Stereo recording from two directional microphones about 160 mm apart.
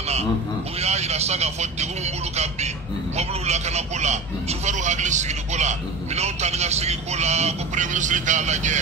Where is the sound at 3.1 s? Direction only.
45° right (ahead or behind).